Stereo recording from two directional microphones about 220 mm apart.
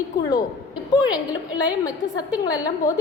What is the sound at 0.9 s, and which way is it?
A woman's voice, 20° left (ahead or behind).